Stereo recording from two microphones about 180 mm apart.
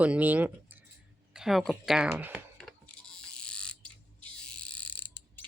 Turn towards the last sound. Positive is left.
turn(degrees=10)  # may be behind; listen again after turning